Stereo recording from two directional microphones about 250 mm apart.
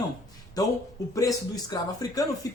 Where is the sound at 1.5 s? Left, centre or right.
Centre.